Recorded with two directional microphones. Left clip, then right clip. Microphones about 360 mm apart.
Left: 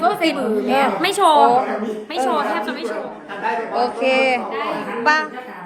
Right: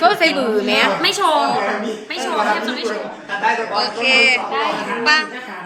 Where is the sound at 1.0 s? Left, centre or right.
Centre.